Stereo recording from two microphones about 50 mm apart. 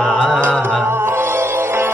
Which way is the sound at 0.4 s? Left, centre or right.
Right.